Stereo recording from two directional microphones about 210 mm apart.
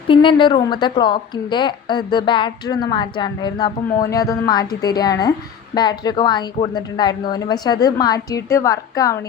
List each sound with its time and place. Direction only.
0.1 s a woman's voice: 25° left (ahead or behind)